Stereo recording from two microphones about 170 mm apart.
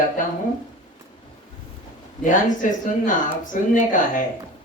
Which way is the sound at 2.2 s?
50° left (ahead or behind).